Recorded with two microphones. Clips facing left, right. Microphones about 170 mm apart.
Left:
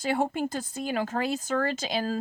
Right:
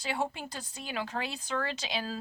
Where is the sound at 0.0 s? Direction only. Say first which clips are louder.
Left 7 dB; 50° left (ahead or behind).